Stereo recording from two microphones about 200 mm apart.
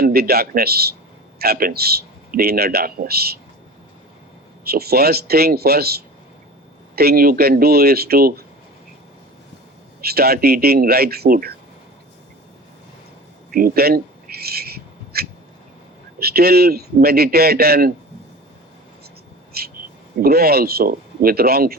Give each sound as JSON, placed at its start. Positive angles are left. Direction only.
{"t": 0.0, "sound": "a man's voice", "side_deg": -50}
{"t": 4.6, "sound": "a man's voice", "side_deg": -50}
{"t": 10.0, "sound": "a man's voice", "side_deg": -50}
{"t": 13.5, "sound": "a sound", "side_deg": -45}
{"t": 16.1, "sound": "a man's voice", "side_deg": -50}
{"t": 19.5, "sound": "a sound", "side_deg": -50}
{"t": 20.2, "sound": "a man's voice", "side_deg": -50}